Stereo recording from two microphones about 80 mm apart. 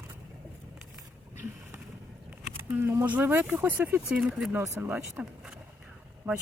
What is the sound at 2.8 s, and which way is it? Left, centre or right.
Speech, right.